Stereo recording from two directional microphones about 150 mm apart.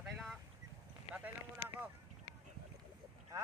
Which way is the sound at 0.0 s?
Centre (ahead or behind).